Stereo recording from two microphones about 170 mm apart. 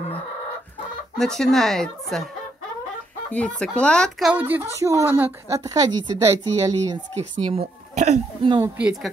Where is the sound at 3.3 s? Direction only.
5° left (ahead or behind); by 7.0 s 20° right (ahead or behind).